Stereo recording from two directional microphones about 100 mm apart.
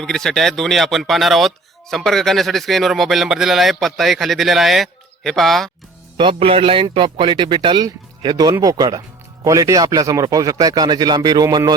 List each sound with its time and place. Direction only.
0.0 s speech: 5° left (ahead or behind)
6.1 s speech: 60° right (ahead or behind); by 11.7 s 40° right (ahead or behind)